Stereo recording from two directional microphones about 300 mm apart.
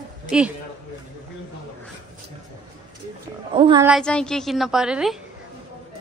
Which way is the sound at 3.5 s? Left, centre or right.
Centre.